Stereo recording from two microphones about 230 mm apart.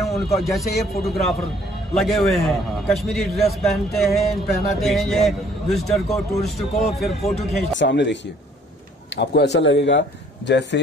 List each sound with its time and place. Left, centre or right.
0.1 s a man's voice: centre
7.8 s speech: left